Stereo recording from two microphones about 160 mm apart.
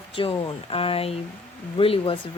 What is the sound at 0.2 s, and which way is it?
Speech, 35° left (ahead or behind).